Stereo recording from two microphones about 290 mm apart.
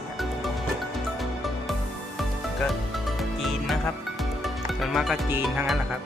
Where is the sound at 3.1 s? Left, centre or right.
Centre.